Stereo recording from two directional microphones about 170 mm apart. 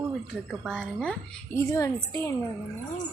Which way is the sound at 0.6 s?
Centre (ahead or behind).